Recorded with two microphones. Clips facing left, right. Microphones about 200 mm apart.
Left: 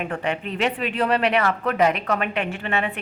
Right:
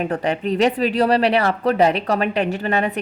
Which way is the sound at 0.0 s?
35° right (ahead or behind).